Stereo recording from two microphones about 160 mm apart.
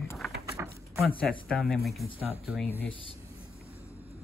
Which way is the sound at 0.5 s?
20° right (ahead or behind).